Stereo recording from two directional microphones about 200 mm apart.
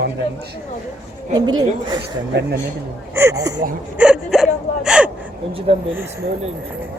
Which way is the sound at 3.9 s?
5° right (ahead or behind).